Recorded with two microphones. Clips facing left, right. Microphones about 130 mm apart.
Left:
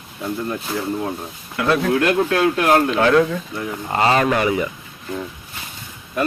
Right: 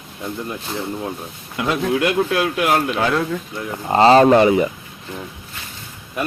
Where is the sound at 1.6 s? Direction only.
20° right (ahead or behind).